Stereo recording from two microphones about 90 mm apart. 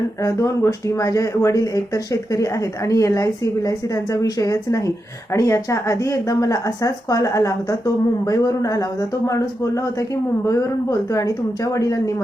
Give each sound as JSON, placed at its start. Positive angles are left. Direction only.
{"t": 0.2, "sound": "speech", "side_deg": 35}